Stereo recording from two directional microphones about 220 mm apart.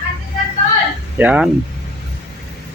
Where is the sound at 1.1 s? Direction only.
5° right (ahead or behind).